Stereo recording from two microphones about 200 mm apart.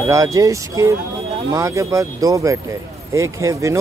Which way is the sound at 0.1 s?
15° right (ahead or behind).